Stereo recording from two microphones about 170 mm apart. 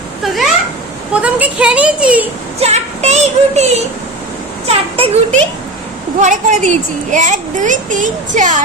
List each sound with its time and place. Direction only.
0.2 s a sound: centre (ahead or behind)
1.1 s speech: 5° right (ahead or behind)
2.6 s child singing: 40° right (ahead or behind)
4.7 s child singing: 35° right (ahead or behind)
6.2 s a child's voice: 45° right (ahead or behind)